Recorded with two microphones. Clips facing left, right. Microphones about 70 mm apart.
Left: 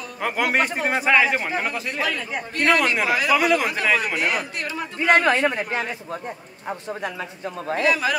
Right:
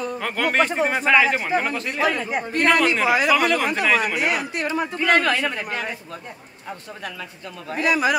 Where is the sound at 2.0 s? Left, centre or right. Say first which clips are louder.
Right 6 dB; right.